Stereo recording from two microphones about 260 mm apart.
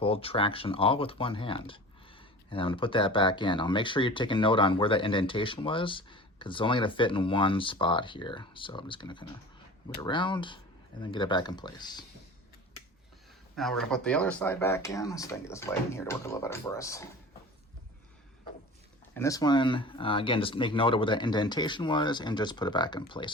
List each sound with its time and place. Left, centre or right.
0.0 s speech: left
13.6 s speech: centre
19.1 s speech: centre